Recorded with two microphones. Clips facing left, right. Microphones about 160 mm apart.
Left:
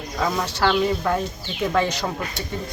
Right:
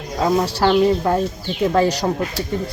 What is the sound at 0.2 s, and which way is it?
Speech, 30° right (ahead or behind).